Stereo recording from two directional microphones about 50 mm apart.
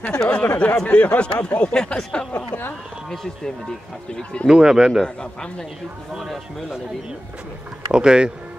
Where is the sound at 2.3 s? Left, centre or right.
Left.